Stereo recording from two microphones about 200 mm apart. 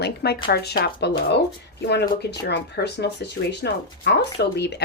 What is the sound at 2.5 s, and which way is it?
Speech, 55° left (ahead or behind).